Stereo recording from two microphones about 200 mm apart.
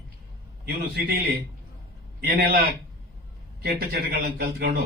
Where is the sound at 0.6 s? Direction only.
50° right (ahead or behind).